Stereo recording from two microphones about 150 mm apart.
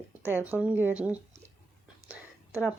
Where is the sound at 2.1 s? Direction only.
10° right (ahead or behind).